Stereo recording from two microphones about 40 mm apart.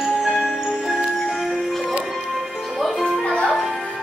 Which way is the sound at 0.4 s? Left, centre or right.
Centre.